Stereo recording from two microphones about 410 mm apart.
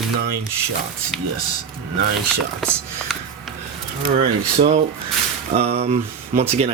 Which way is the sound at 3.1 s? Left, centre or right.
Centre.